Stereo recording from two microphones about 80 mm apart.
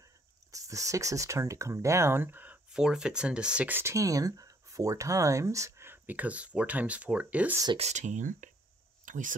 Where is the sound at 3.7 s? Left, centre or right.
Right; by 7.6 s centre.